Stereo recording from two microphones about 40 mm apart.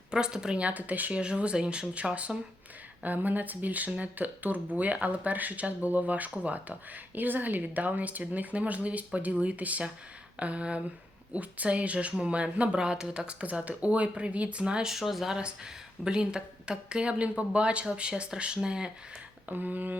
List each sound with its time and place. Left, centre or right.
0.1 s speech: centre
0.6 s speech: right
1.1 s speech: right
3.0 s speech: right
7.2 s speech: right
13.7 s speech: right
14.6 s speech: right
14.8 s speech: centre
15.4 s speech: right
19.5 s speech: right